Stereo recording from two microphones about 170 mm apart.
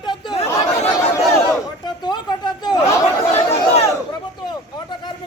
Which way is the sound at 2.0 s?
25° left (ahead or behind).